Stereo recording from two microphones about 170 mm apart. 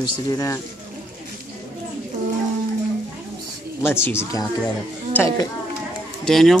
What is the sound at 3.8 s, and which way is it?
Speech, 15° left (ahead or behind).